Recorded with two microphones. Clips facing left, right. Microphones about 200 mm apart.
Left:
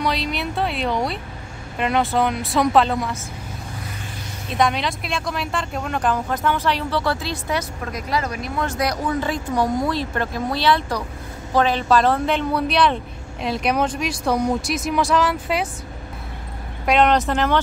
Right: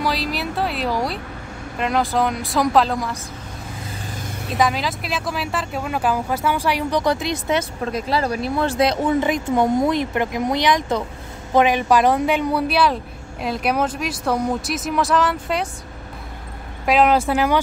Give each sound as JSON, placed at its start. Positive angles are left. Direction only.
{"t": 0.0, "sound": "speech", "side_deg": 0}
{"t": 4.5, "sound": "speech", "side_deg": 0}
{"t": 16.8, "sound": "speech", "side_deg": -5}